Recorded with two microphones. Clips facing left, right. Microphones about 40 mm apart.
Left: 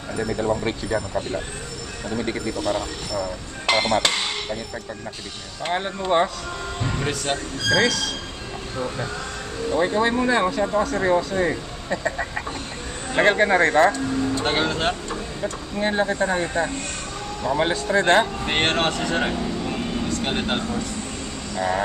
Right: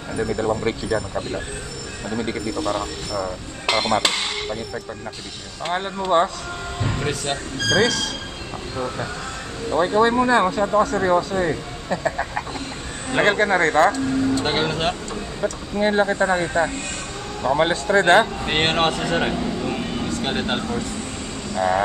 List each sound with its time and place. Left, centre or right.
0.2 s speech: centre
2.8 s speech: centre
5.6 s speech: centre
9.7 s speech: centre
13.4 s speech: centre
19.1 s a sound: centre
20.2 s speech: centre